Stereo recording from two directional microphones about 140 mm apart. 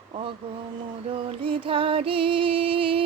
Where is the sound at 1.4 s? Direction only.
40° right (ahead or behind).